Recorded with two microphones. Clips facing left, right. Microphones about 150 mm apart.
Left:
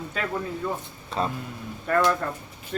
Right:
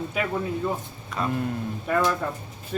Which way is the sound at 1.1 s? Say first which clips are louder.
Left 2 dB; 30° left (ahead or behind).